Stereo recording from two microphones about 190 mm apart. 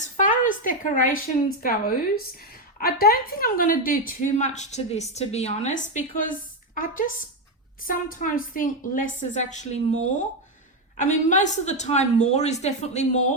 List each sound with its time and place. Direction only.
0.0 s a woman's voice: 45° left (ahead or behind)
2.7 s a woman's voice: 50° left (ahead or behind)